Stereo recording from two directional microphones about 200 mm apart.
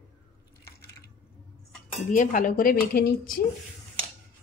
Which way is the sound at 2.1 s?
40° left (ahead or behind).